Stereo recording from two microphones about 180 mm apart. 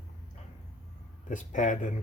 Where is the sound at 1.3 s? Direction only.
45° left (ahead or behind).